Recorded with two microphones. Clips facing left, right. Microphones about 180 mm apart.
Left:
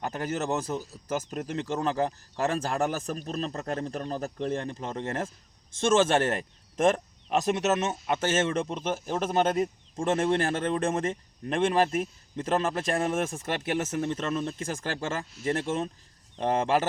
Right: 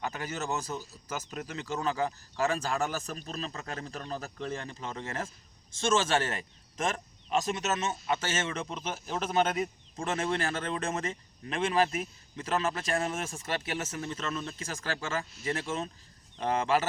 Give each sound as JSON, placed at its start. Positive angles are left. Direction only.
{"t": 0.0, "sound": "speech", "side_deg": 50}